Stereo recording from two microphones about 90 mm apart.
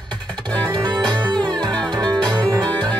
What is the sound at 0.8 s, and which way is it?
Music, 50° right (ahead or behind).